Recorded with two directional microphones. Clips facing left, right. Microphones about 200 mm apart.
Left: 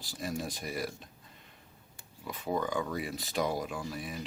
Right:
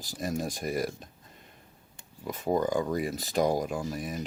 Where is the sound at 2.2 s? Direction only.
45° right (ahead or behind).